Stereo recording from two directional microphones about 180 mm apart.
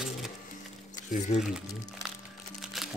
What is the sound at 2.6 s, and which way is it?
Music, centre (ahead or behind).